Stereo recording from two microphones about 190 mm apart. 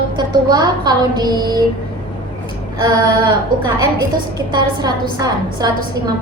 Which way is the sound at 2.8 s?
25° right (ahead or behind).